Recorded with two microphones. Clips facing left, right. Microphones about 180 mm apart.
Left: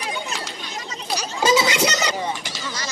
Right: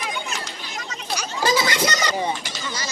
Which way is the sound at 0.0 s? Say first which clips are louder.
Left 1 dB; 35° left (ahead or behind).